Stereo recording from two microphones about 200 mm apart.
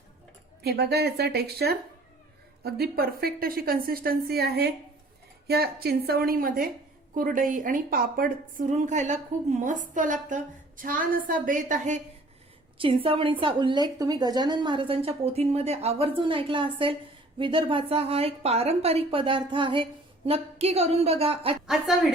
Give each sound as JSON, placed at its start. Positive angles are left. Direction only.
{"t": 0.6, "sound": "a woman's voice", "side_deg": -55}
{"t": 12.8, "sound": "a woman's voice", "side_deg": -25}
{"t": 21.7, "sound": "a woman's voice", "side_deg": 0}